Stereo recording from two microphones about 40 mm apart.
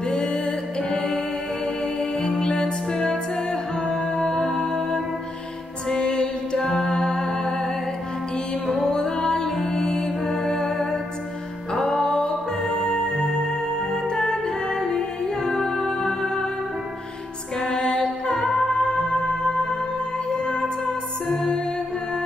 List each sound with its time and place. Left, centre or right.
0.0 s music: left
3.1 s music: left
8.8 s music: centre
10.0 s music: centre
10.4 s music: centre
16.0 s music: centre
17.6 s music: centre
18.3 s music: left
18.7 s music: centre